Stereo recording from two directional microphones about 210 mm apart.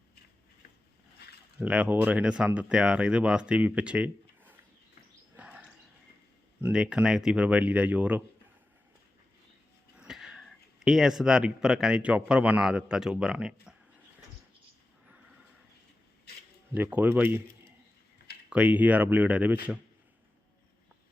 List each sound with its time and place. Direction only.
1.5 s speech: 5° right (ahead or behind)
5.4 s a sound: 5° right (ahead or behind)
6.6 s speech: 5° right (ahead or behind)
10.0 s a sound: centre (ahead or behind)
10.8 s speech: centre (ahead or behind)
16.7 s speech: 10° right (ahead or behind)
18.4 s speech: 5° right (ahead or behind)